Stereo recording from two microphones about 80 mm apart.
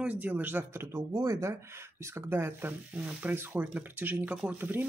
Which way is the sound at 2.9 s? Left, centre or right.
Centre.